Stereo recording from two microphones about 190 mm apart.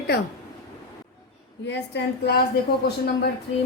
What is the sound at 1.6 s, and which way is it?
Speech, 65° left (ahead or behind).